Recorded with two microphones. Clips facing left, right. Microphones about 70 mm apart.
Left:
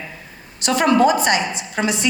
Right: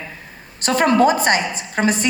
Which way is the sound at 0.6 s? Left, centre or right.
Right.